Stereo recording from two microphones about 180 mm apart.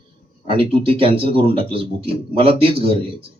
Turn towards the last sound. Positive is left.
turn(degrees=-30)  # may be behind; listen again after turning